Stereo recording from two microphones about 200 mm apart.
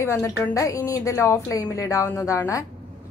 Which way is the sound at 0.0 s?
15° left (ahead or behind).